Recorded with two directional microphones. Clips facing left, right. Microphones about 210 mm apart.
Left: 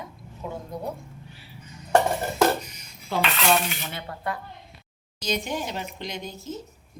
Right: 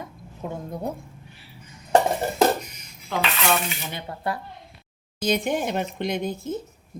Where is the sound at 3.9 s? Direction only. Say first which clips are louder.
Right 2 dB; 25° right (ahead or behind).